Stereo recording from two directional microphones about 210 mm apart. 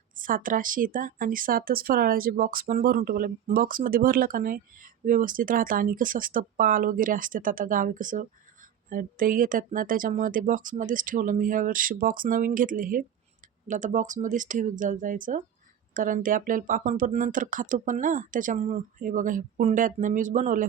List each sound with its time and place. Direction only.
0.2 s speech: 40° right (ahead or behind)